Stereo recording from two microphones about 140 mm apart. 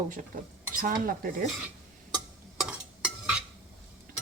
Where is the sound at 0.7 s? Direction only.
85° right.